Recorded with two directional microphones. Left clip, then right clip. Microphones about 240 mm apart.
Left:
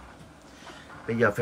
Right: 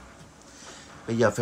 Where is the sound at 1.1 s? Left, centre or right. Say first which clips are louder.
Right 1 dB; centre.